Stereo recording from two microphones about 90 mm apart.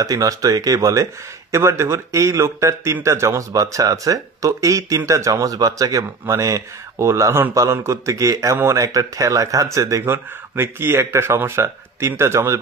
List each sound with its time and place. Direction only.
0.0 s speech: 40° right (ahead or behind)
10.0 s speech: 25° right (ahead or behind)